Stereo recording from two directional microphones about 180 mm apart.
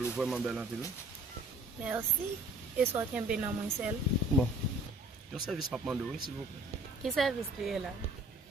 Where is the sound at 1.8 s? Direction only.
10° right (ahead or behind).